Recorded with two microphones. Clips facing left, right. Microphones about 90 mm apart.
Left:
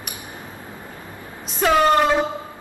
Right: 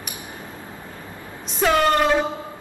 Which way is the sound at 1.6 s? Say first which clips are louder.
Left 1 dB; centre (ahead or behind).